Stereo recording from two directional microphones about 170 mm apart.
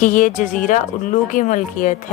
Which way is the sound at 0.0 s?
50° left (ahead or behind).